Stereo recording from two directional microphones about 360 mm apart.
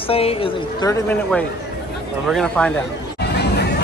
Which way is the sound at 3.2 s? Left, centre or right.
Left.